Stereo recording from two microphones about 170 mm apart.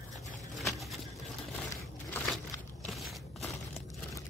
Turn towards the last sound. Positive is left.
turn(degrees=0)  # may be behind; listen again after turning